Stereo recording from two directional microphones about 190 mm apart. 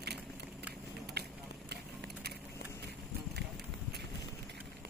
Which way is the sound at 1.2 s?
60° right (ahead or behind).